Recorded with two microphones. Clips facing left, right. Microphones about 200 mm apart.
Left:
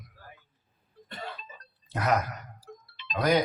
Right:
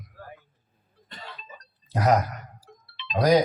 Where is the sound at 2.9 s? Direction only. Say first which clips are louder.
Right 6 dB; 45° left (ahead or behind).